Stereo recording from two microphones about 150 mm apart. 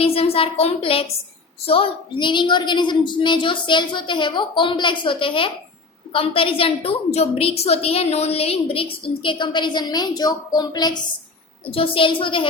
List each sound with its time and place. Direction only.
0.0 s a woman's voice: 40° left (ahead or behind)
11.6 s a woman's voice: 35° left (ahead or behind)